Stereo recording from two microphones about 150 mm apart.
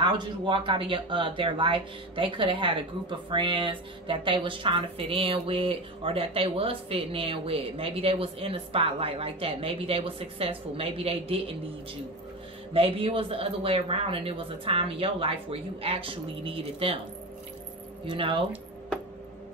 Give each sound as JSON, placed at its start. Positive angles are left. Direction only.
{"t": 0.0, "sound": "speech", "side_deg": -35}
{"t": 12.7, "sound": "speech", "side_deg": -40}
{"t": 18.0, "sound": "speech", "side_deg": -35}